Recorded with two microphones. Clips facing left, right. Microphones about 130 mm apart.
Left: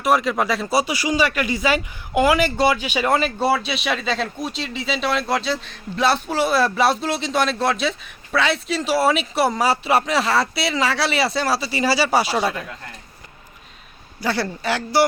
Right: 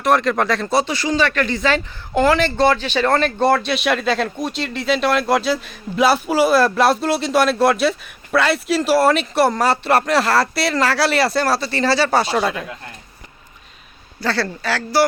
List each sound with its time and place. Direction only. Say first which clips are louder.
0.0 s speech: right 2 dB; 5° left (ahead or behind)
14.2 s speech: right 1 dB; 15° left (ahead or behind)